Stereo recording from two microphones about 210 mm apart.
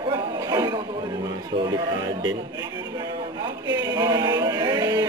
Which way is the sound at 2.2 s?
20° right (ahead or behind).